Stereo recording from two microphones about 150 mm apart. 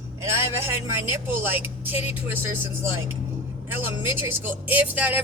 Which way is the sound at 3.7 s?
10° right (ahead or behind).